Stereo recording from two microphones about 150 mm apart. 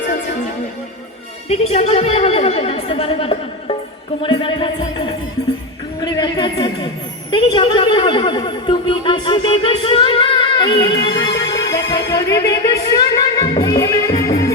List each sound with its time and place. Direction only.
1.5 s a woman's voice: 45° left (ahead or behind)
4.2 s music: 35° left (ahead or behind)
6.0 s a sound: 25° left (ahead or behind)